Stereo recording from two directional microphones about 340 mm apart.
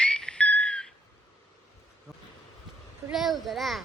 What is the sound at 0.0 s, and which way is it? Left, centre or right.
Whistle, centre.